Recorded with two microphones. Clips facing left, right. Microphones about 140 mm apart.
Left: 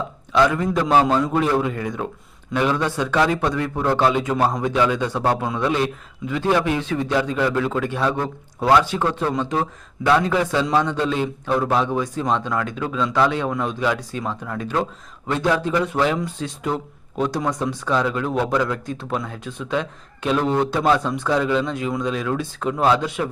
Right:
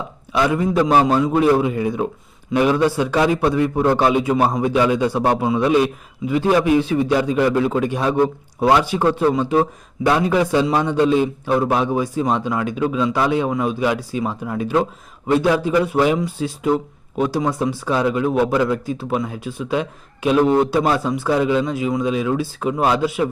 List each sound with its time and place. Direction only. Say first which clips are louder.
0.3 s a man's voice: right 1 dB; 15° right (ahead or behind)